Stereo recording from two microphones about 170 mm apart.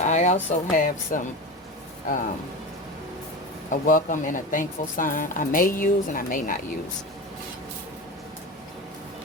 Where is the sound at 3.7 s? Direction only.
50° left (ahead or behind).